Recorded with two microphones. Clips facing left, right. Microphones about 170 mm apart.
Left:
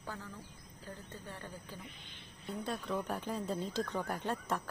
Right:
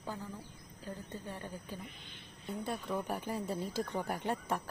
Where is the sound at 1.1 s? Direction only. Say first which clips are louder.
Right 4 dB; 15° right (ahead or behind).